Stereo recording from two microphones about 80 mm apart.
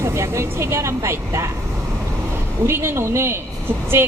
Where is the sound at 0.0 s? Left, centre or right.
Right.